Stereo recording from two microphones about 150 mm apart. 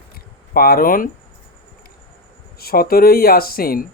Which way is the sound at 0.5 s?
80° left.